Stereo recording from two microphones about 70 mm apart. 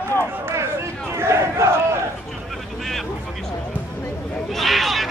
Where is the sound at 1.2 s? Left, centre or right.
Right.